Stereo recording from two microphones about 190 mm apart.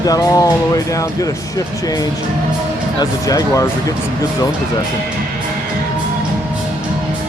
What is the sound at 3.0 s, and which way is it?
Speech, 20° left (ahead or behind).